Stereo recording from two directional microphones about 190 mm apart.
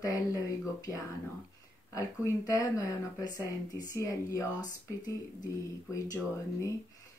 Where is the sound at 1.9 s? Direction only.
15° left (ahead or behind).